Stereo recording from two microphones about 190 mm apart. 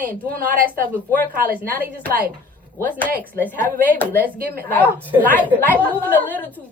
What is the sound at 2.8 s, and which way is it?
A woman's voice, 10° left (ahead or behind).